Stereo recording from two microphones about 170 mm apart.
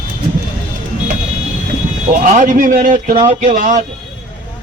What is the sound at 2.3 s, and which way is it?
A man's voice, 50° right (ahead or behind).